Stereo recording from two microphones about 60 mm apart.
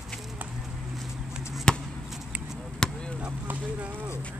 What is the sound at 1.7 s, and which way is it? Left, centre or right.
Basketball bounce, centre.